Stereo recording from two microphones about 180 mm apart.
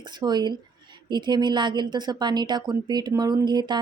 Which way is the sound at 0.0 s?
25° right (ahead or behind).